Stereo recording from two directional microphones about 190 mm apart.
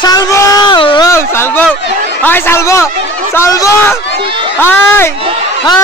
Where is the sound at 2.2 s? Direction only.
10° left (ahead or behind).